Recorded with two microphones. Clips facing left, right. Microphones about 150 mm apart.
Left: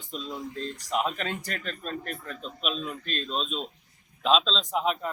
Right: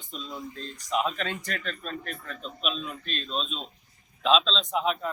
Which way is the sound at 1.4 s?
35° left (ahead or behind).